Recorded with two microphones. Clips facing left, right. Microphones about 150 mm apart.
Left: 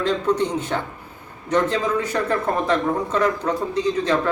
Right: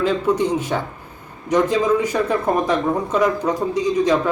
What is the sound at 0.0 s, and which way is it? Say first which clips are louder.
Speech: right 2 dB; 10° right (ahead or behind).